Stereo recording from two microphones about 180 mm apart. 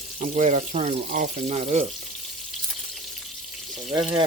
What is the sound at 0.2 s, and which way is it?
Speech, 40° right (ahead or behind).